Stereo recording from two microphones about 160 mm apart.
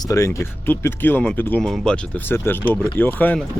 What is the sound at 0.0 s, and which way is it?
Speech, 20° left (ahead or behind).